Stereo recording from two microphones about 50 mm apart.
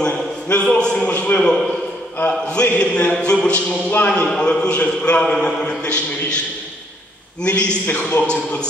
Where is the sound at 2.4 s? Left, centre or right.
Left.